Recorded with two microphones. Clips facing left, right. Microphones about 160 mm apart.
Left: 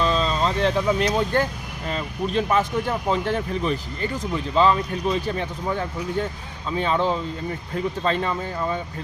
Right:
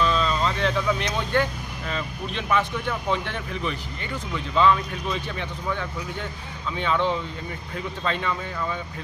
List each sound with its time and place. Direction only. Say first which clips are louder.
0.0 s vehicle: left 1 dB; 35° left (ahead or behind)
1.9 s speech: left 6 dB; 40° left (ahead or behind)